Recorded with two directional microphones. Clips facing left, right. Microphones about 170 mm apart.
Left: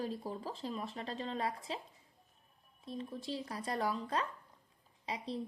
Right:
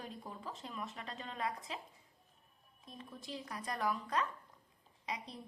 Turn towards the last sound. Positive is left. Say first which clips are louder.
# left 5 dB
turn(degrees=30)  # may be behind; listen again after turning